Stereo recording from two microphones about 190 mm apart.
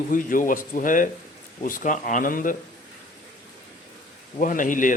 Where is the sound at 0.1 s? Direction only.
45° left (ahead or behind).